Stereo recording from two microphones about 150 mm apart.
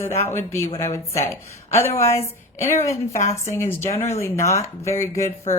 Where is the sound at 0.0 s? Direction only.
15° left (ahead or behind).